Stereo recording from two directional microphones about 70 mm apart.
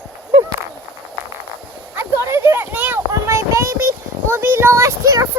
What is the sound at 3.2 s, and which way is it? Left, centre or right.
Speech, right.